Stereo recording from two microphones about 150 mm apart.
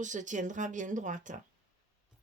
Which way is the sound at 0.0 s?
55° right (ahead or behind).